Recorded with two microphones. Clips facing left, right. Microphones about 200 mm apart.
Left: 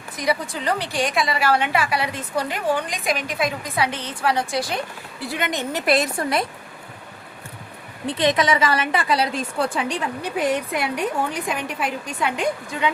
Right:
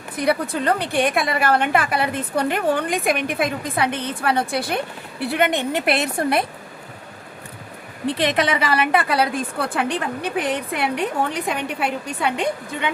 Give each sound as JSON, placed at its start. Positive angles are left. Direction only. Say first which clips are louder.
{"t": 0.2, "sound": "a woman's voice", "louder": "right 4 dB", "side_deg": -60}
{"t": 8.0, "sound": "a woman's voice", "louder": "even", "side_deg": -65}